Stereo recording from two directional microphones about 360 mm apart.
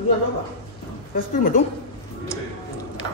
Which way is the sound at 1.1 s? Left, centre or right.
Left.